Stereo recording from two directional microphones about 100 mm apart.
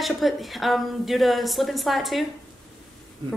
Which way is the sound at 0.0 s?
Centre (ahead or behind).